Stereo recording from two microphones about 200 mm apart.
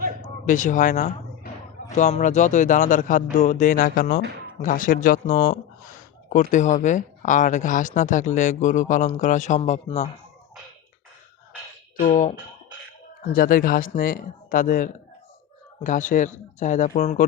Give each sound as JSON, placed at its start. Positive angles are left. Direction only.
{"t": 0.4, "sound": "speech", "side_deg": 40}
{"t": 11.9, "sound": "speech", "side_deg": 40}